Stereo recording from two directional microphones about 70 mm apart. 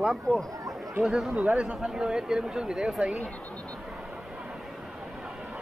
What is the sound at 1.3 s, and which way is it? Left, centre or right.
A man's voice, centre.